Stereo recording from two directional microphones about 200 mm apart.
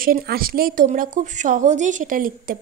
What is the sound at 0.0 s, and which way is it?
Speech, 45° right (ahead or behind).